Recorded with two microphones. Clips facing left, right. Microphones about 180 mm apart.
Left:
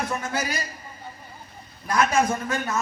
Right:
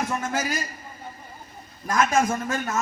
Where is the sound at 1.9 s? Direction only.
45° right (ahead or behind).